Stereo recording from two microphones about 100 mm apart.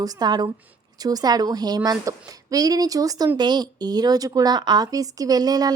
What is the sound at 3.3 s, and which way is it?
Speech, 45° right (ahead or behind).